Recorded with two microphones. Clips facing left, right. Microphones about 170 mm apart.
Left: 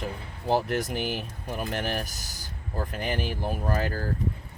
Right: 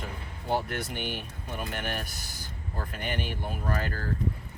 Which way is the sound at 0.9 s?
5° left (ahead or behind).